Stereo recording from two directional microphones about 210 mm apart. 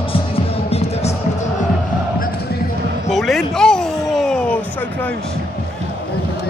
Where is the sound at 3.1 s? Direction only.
Centre (ahead or behind).